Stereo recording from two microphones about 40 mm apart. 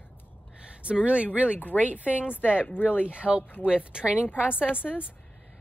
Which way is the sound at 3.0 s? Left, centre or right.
Right.